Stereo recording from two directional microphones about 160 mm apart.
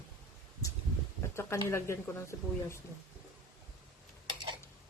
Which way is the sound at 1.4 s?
15° left (ahead or behind).